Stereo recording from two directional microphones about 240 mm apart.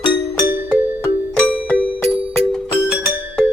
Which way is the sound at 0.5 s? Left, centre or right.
Centre.